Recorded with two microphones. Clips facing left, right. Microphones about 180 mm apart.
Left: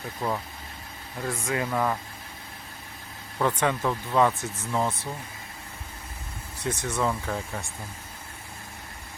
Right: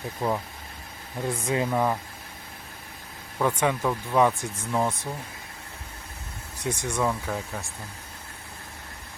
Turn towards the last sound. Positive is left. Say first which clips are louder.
# even
turn(degrees=0)  # may be behind; listen again after turning